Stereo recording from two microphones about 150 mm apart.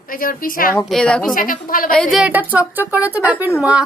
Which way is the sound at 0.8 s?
5° left (ahead or behind).